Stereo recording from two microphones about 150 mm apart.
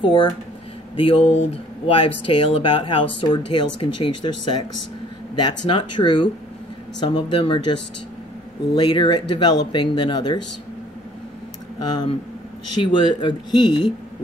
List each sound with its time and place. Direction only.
0.0 s speech: 30° left (ahead or behind)
5.7 s speech: 35° left (ahead or behind)
8.7 s speech: 30° left (ahead or behind)
12.8 s speech: 30° left (ahead or behind)